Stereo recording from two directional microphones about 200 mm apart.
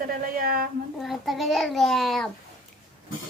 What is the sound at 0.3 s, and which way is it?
Speech, 45° right (ahead or behind).